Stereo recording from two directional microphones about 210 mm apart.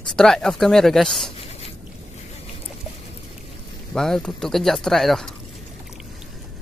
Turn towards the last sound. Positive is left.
turn(degrees=0)  # may be behind; listen again after turning